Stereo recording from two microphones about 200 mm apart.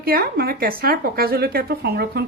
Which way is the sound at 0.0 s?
50° right (ahead or behind).